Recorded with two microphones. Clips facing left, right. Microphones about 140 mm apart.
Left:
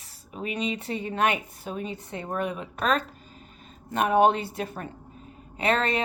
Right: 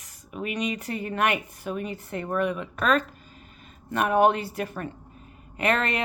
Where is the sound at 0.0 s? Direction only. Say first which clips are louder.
Right 1 dB; 35° left (ahead or behind).